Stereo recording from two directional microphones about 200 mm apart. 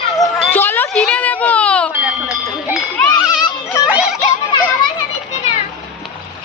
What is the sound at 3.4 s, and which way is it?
Children playing, 15° left (ahead or behind).